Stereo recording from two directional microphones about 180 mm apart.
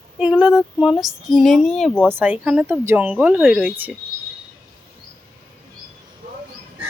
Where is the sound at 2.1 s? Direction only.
10° right (ahead or behind).